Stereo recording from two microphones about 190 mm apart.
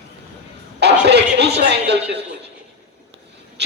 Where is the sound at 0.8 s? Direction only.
60° right (ahead or behind).